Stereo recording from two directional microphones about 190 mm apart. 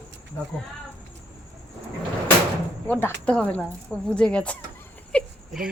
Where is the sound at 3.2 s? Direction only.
5° left (ahead or behind).